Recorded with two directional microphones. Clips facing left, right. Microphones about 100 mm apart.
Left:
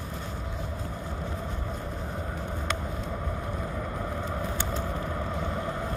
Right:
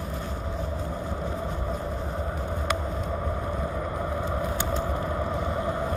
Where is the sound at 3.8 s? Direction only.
15° right (ahead or behind).